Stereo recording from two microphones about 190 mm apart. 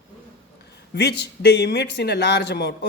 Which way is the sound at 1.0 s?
60° left (ahead or behind).